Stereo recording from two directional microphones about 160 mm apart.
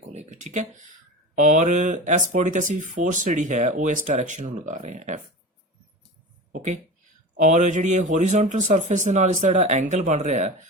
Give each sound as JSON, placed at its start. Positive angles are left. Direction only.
{"t": 0.1, "sound": "a sound", "side_deg": -45}
{"t": 1.4, "sound": "speech", "side_deg": -50}
{"t": 6.5, "sound": "speech", "side_deg": -50}